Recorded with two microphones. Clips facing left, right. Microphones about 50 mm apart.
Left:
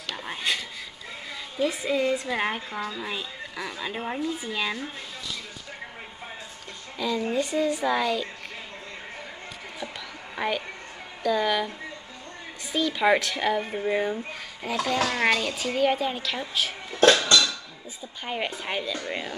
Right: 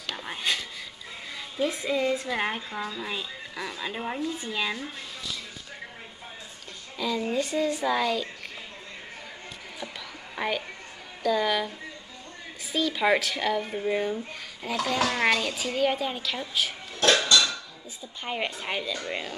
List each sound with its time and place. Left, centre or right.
0.0 s cutlery: centre
1.6 s speech: centre
7.0 s speech: centre
10.3 s a woman's voice: centre
12.7 s speech: centre
17.1 s dishes: centre
18.2 s speech: centre